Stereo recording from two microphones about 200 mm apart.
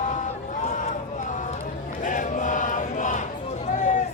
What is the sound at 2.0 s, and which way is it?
Chant, 40° left (ahead or behind).